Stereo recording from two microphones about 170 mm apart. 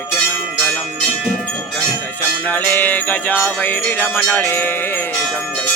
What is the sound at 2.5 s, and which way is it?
Music, 10° left (ahead or behind).